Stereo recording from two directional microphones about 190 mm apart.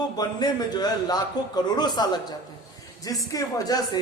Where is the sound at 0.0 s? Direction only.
20° left (ahead or behind).